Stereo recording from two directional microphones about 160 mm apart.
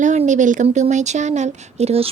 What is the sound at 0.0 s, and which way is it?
Speech, 50° right (ahead or behind).